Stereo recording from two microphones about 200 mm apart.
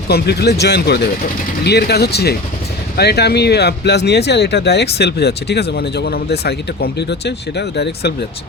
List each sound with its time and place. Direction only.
0.1 s speech: 55° left (ahead or behind)